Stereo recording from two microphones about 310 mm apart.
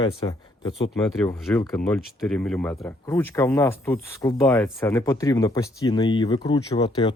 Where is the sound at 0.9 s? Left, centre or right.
Centre.